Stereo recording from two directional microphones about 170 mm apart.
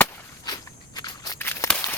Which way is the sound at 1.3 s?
15° left (ahead or behind).